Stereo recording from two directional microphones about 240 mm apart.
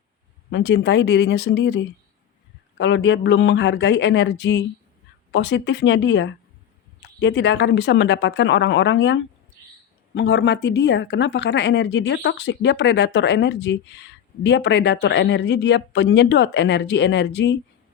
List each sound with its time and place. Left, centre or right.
0.5 s speech: left